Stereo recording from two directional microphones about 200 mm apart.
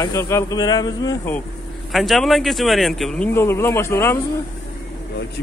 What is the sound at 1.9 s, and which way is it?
Speech, centre (ahead or behind).